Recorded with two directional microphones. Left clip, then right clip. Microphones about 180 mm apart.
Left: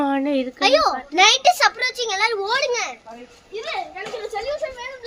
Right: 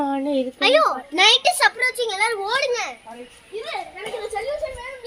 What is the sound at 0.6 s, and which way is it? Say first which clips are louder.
Speech: even; 60° left (ahead or behind).